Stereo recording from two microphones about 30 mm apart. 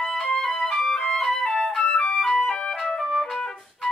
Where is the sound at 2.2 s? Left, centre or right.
Centre.